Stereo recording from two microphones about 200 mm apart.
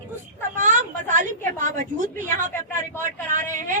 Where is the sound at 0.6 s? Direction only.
40° right (ahead or behind).